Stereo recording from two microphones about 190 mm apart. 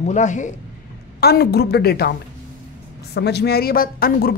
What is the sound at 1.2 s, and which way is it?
Speech, 55° left (ahead or behind).